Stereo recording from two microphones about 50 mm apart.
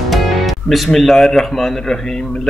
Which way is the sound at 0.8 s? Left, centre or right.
Centre.